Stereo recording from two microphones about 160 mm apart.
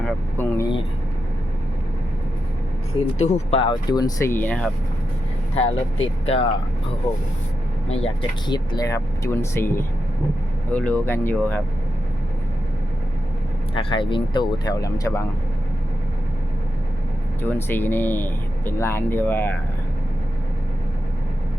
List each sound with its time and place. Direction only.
0.3 s speech: 20° left (ahead or behind)
3.2 s speech: 40° left (ahead or behind); by 4.7 s 10° left (ahead or behind)
5.5 s speech: 35° left (ahead or behind)
7.9 s speech: 35° left (ahead or behind); by 11.6 s 10° left (ahead or behind)
13.7 s speech: 30° left (ahead or behind)
17.4 s speech: 10° left (ahead or behind)